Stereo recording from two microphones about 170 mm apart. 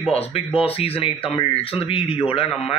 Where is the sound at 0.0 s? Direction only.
35° left (ahead or behind).